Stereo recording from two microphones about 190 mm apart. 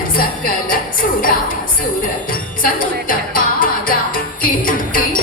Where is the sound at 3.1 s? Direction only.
45° left (ahead or behind).